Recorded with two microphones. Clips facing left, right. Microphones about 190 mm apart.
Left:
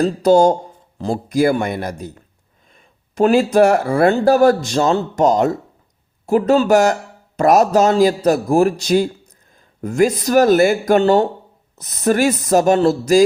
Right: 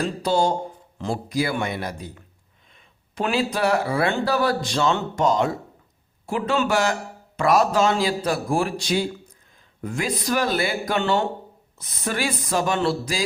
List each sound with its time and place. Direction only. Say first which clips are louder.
0.0 s a man's voice: left 9 dB; 45° left (ahead or behind)